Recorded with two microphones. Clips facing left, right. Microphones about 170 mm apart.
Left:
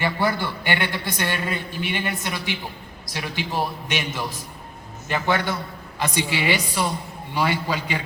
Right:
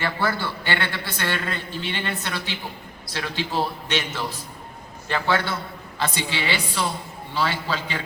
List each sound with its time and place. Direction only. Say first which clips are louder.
0.0 s a man's voice: left 2 dB; 15° left (ahead or behind)